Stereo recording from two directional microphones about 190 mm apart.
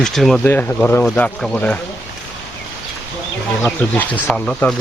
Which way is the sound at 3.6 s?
5° left (ahead or behind).